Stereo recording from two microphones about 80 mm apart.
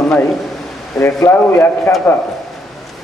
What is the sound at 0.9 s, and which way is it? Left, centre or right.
Speech, left.